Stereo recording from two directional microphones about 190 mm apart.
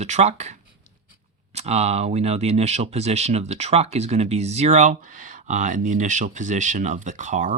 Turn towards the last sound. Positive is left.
turn(degrees=-40)  # may be behind; listen again after turning